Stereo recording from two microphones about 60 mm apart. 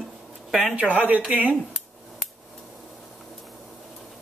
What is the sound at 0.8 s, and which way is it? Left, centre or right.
Speech, right.